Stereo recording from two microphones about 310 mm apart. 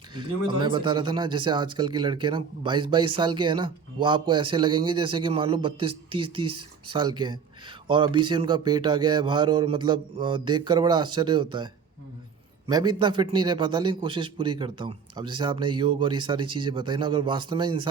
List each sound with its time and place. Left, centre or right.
0.1 s speech: centre
6.5 s speech: right
6.9 s speech: centre